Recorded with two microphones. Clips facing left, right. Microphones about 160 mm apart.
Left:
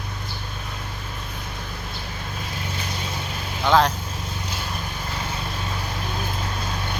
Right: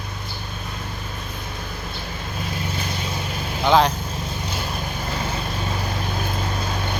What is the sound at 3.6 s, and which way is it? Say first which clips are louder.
Speech: right 2 dB; 5° right (ahead or behind).